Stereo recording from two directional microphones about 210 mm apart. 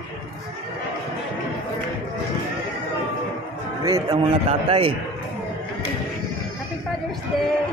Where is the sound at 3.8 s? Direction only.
20° right (ahead or behind).